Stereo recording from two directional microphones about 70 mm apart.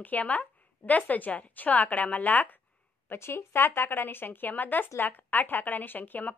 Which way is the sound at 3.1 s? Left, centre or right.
Left.